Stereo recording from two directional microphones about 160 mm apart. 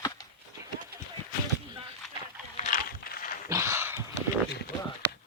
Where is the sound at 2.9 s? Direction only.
65° left (ahead or behind).